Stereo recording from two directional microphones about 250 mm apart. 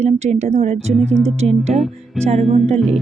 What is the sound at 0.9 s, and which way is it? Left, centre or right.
Speech, centre.